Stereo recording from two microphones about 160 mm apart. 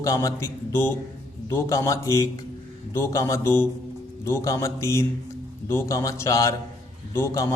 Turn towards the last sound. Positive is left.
turn(degrees=15)  # may be behind; listen again after turning